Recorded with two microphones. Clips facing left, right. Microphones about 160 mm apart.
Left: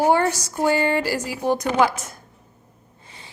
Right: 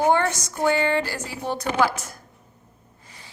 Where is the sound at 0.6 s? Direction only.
10° left (ahead or behind).